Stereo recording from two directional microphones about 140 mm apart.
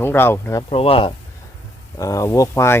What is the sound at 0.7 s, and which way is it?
Speech, 45° left (ahead or behind).